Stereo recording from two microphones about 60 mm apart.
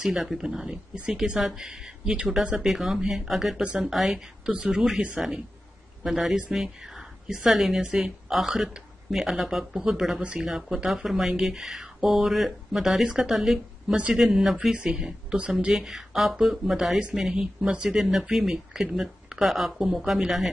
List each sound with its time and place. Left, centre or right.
0.0 s speech: centre
4.5 s speech: centre
6.0 s a woman's voice: centre
13.9 s speech: centre
14.2 s speech: centre